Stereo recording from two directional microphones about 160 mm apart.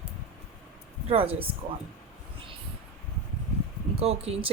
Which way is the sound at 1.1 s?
35° right (ahead or behind).